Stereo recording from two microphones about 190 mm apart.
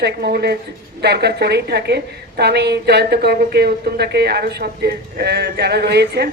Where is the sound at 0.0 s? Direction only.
55° right (ahead or behind).